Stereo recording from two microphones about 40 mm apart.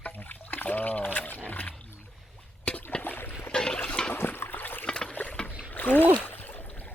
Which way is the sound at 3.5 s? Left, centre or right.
Centre.